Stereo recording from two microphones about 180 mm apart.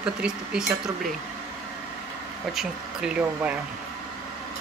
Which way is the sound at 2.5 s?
5° right (ahead or behind).